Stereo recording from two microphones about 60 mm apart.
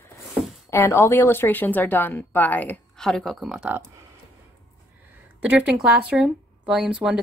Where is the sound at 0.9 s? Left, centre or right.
Left.